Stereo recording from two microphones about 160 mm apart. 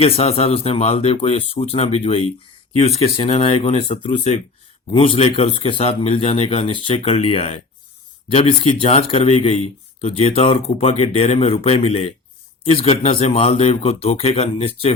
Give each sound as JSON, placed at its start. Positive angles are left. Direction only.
{"t": 0.0, "sound": "speech", "side_deg": 40}